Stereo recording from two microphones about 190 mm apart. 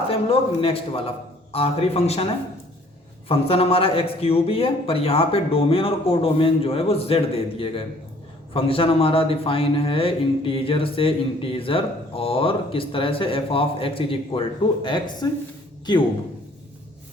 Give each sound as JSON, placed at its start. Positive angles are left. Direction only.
{"t": 0.1, "sound": "a man's voice", "side_deg": 30}